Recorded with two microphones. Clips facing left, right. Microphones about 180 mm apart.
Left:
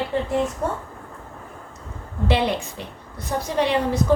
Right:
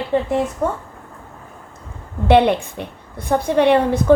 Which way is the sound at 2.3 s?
60° right (ahead or behind).